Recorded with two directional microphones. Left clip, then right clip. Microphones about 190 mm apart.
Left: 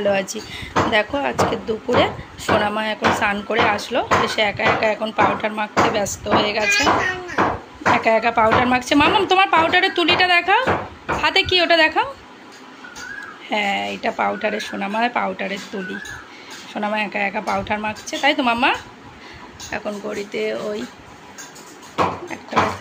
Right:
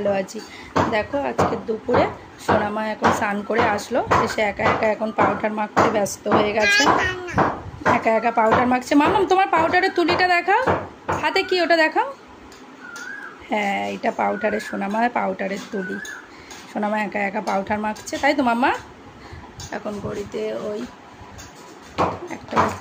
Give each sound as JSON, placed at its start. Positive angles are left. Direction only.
{"t": 0.0, "sound": "speech", "side_deg": 0}
{"t": 6.2, "sound": "speech", "side_deg": -30}
{"t": 7.9, "sound": "speech", "side_deg": -10}
{"t": 13.5, "sound": "speech", "side_deg": -15}
{"t": 16.7, "sound": "speech", "side_deg": -15}
{"t": 20.1, "sound": "speech", "side_deg": 0}